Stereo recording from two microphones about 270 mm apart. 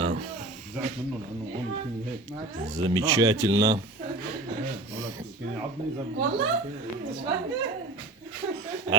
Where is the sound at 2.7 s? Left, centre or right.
Centre.